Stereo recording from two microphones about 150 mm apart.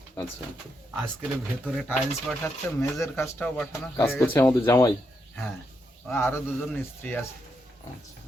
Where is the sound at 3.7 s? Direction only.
15° left (ahead or behind).